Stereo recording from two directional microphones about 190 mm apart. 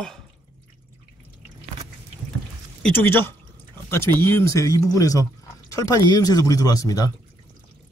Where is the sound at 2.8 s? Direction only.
10° left (ahead or behind).